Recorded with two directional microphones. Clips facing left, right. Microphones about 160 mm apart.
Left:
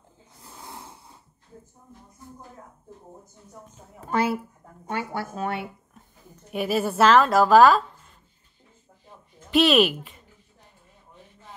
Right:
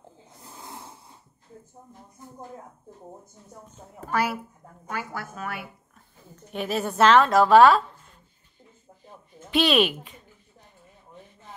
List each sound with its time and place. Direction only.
4.1 s a woman's voice: 25° left (ahead or behind)
6.5 s a woman's voice: 5° left (ahead or behind)
9.5 s a woman's voice: centre (ahead or behind)